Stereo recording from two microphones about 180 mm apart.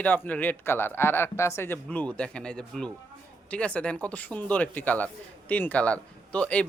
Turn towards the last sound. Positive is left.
turn(degrees=5)  # may be behind; listen again after turning